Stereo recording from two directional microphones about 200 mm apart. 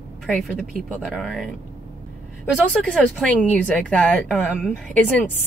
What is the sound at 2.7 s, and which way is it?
Speech, 5° left (ahead or behind).